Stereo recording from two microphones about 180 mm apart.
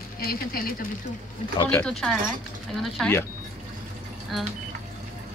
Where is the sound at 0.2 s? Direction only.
55° left (ahead or behind).